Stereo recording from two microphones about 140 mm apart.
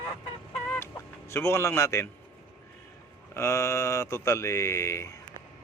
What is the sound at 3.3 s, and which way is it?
Speech, 20° left (ahead or behind).